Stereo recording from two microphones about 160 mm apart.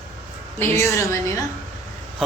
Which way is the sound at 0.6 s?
15° left (ahead or behind).